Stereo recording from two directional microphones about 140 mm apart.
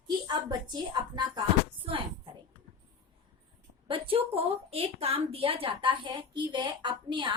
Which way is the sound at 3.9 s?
40° right (ahead or behind).